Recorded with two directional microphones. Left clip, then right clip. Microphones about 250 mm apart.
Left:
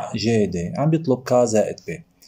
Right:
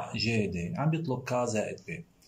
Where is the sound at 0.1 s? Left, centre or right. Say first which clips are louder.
Left 11 dB; left.